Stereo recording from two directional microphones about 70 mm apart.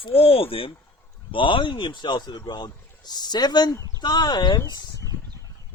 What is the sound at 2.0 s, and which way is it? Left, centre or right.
Speech, left.